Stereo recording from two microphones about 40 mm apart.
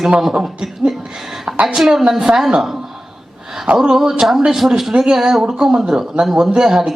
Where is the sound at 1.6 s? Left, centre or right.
Centre.